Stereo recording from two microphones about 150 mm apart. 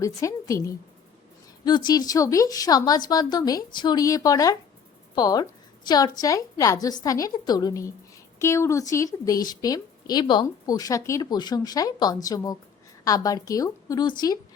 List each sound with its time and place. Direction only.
0.0 s a woman's voice: 20° left (ahead or behind)